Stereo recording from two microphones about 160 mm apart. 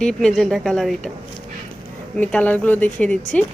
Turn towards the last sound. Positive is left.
turn(degrees=5)  # may be behind; listen again after turning